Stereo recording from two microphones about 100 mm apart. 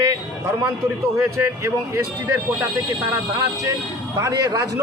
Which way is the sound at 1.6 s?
30° right (ahead or behind).